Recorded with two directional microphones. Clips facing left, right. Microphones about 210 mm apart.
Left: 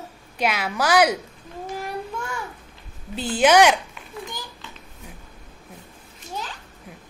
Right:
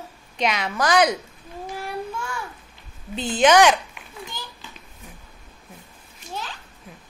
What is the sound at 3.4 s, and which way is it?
Speech, 10° left (ahead or behind).